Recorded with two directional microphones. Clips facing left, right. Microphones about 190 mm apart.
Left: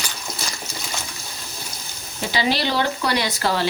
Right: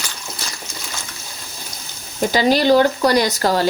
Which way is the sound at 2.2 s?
45° right (ahead or behind).